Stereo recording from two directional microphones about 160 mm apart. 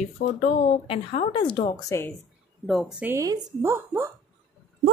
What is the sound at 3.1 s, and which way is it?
Speech, 20° right (ahead or behind).